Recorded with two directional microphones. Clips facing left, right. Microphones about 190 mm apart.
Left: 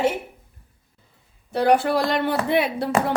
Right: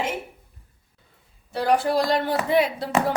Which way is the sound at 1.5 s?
60° left (ahead or behind).